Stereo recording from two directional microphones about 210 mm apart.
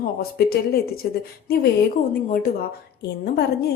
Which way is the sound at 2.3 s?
45° left (ahead or behind).